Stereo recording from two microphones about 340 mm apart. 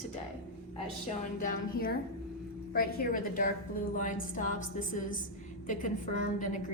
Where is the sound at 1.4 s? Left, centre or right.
Left.